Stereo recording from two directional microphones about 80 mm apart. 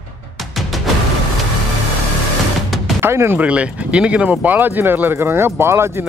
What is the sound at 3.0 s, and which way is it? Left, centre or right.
Speech, right.